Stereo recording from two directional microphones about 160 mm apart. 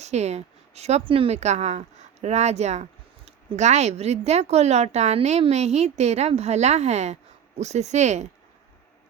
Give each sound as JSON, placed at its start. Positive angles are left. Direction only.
{"t": 0.0, "sound": "speech", "side_deg": -45}